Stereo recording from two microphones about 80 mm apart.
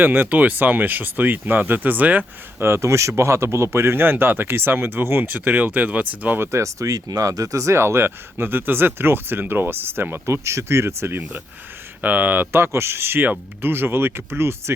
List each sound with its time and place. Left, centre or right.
0.0 s speech: right
2.6 s speech: right
12.0 s speech: right